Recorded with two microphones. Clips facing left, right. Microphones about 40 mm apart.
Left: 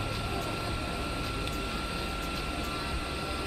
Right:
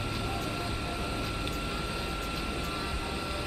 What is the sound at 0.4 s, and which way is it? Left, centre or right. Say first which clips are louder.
Vehicle: even; centre.